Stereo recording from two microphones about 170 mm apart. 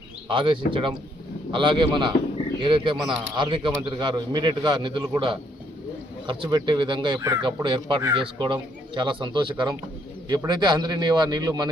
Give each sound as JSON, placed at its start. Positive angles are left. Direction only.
{"t": 0.3, "sound": "a man's voice", "side_deg": -30}